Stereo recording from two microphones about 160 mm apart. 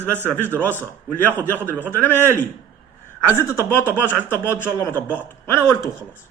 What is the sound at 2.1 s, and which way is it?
Speech, 15° right (ahead or behind).